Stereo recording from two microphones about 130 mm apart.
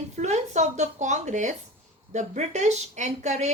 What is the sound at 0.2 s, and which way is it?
Speech, 60° right (ahead or behind).